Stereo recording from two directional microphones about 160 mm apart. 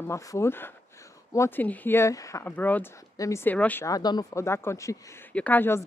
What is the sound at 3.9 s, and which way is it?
A woman's voice, 25° left (ahead or behind).